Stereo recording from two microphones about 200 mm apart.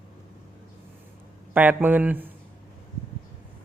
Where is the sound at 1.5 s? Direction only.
10° right (ahead or behind).